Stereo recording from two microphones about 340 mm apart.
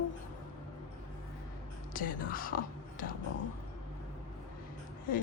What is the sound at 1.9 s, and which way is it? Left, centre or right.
Speech, left.